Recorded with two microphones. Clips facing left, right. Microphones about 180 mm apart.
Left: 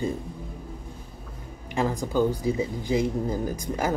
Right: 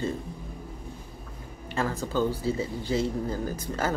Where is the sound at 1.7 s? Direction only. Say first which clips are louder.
Left 3 dB; 15° left (ahead or behind).